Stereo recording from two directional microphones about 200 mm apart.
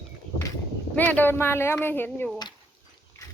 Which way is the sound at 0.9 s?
10° left (ahead or behind).